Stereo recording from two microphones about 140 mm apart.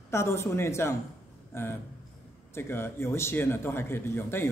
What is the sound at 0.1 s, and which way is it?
A man's voice, 20° left (ahead or behind).